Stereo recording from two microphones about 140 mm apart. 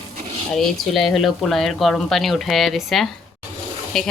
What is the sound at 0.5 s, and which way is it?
Speech, centre (ahead or behind).